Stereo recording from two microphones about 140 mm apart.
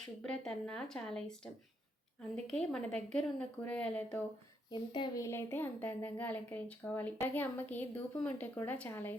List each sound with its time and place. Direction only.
0.2 s speech: 5° left (ahead or behind)
4.7 s speech: 30° left (ahead or behind)
5.2 s speech: 20° left (ahead or behind)